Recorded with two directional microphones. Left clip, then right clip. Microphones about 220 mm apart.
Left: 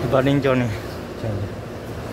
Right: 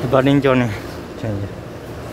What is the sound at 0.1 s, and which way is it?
Speech, 10° right (ahead or behind).